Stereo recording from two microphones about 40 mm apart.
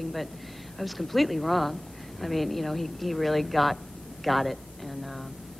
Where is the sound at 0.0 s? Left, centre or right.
Centre.